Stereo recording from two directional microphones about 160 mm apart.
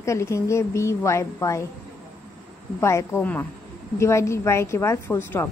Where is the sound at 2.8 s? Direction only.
15° left (ahead or behind).